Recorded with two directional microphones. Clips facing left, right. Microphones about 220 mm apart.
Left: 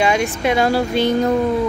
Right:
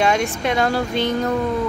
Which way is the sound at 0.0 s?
5° left (ahead or behind).